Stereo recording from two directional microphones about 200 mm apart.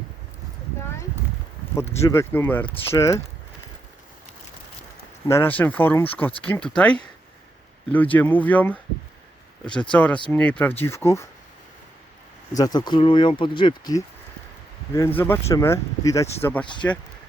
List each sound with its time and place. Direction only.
2.0 s speech: 15° left (ahead or behind)
5.3 s speech: 10° left (ahead or behind)
9.9 s speech: 5° left (ahead or behind)
12.5 s speech: 20° left (ahead or behind)